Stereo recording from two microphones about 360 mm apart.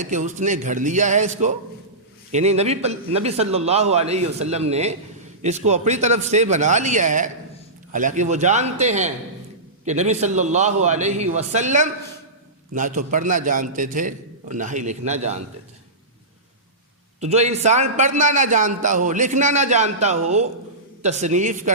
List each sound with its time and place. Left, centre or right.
0.0 s a man's voice: right
17.2 s a man's voice: centre